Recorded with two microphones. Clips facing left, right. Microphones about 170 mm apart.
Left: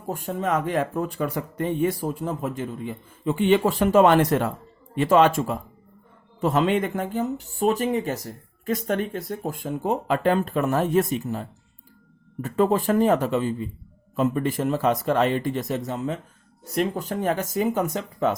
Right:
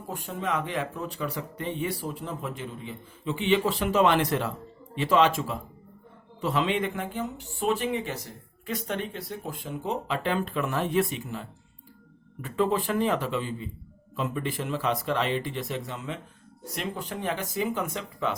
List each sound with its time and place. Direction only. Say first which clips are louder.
0.1 s speech: left 6 dB; 45° left (ahead or behind)